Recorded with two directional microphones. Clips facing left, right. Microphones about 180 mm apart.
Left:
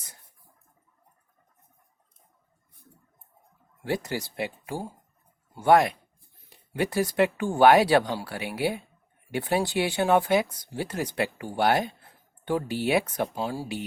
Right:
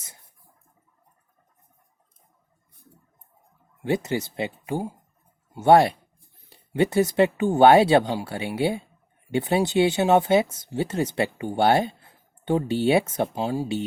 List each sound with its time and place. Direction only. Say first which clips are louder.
3.8 s speech: right 5 dB; 20° right (ahead or behind)